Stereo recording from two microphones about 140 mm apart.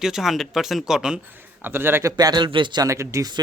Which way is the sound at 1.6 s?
15° right (ahead or behind).